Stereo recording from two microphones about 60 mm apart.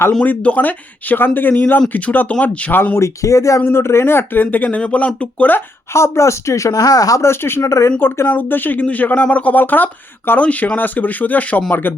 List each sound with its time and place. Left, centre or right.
0.2 s speech: left
3.0 s speech: left
5.9 s speech: left
7.2 s speech: left
7.6 s speech: left
7.9 s speech: left